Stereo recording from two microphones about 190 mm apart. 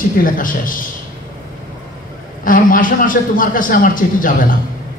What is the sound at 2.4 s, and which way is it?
A man's voice, 45° left (ahead or behind).